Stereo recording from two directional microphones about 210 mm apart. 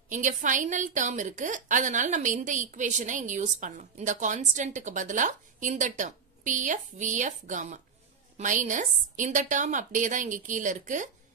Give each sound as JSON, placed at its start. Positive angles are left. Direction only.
{"t": 0.1, "sound": "a woman's voice", "side_deg": -35}